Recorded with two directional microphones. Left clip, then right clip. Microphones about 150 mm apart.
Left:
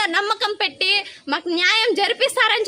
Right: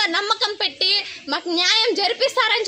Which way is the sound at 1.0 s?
10° left (ahead or behind).